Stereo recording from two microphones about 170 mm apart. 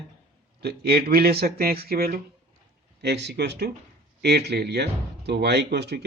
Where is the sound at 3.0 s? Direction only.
85° right.